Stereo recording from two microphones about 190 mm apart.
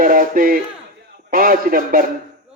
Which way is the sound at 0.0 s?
45° right (ahead or behind).